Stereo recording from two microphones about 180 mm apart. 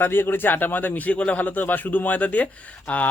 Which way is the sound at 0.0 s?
10° left (ahead or behind).